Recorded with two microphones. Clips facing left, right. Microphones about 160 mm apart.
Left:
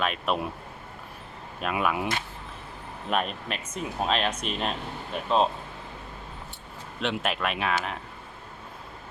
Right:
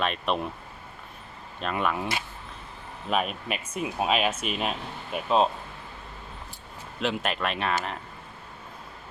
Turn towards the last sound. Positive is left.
turn(degrees=0)  # may be behind; listen again after turning